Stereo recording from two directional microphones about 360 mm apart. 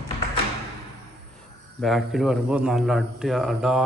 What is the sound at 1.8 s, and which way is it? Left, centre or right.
A man's voice, centre.